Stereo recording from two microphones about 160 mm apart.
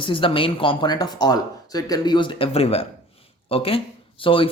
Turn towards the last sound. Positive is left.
turn(degrees=35)  # may be behind; listen again after turning